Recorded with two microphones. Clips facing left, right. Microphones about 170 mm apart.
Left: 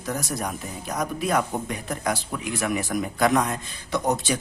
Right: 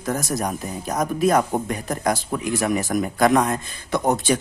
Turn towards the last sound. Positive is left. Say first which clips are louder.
# right 4 dB
turn(degrees=-55)  # may be behind; listen again after turning